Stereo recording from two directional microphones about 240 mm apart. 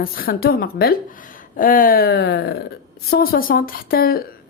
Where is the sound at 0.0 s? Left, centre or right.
Left.